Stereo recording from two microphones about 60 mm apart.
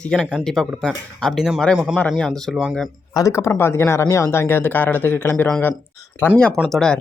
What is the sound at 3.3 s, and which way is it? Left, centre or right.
Speech, left.